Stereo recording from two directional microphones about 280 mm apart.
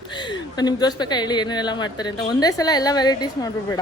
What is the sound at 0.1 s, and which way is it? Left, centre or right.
A woman's voice, centre.